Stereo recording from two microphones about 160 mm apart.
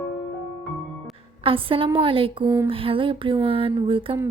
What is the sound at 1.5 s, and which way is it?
Speech, 35° right (ahead or behind).